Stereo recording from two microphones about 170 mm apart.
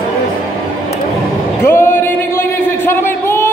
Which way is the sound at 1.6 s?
15° left (ahead or behind).